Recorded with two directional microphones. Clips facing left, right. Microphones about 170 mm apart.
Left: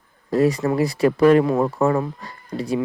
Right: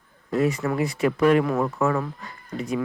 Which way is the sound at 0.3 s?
35° left (ahead or behind).